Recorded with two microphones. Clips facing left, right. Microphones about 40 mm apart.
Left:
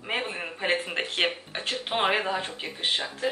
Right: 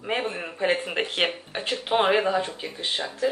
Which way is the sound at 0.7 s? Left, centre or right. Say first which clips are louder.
Right 2 dB; centre.